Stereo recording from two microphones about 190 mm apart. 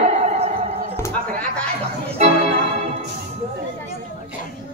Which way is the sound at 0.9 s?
10° left (ahead or behind).